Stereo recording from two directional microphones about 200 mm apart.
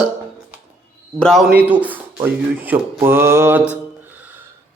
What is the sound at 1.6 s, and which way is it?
Speech, 5° right (ahead or behind).